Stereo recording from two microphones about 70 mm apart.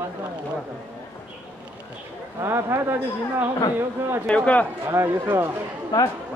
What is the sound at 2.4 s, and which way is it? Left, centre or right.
Speech, right.